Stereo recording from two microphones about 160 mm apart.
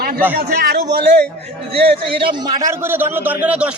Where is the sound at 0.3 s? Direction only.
80° right.